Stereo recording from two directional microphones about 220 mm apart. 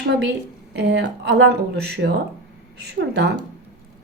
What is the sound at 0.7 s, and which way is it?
Speech, 50° right (ahead or behind).